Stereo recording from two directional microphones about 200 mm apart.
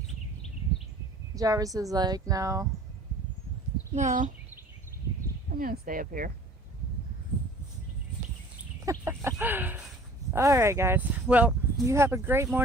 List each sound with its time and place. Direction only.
1.4 s speech: 15° right (ahead or behind)
3.9 s speech: 40° right (ahead or behind)
5.5 s speech: 45° right (ahead or behind)
8.9 s chicken: 10° right (ahead or behind)
10.3 s speech: 15° right (ahead or behind)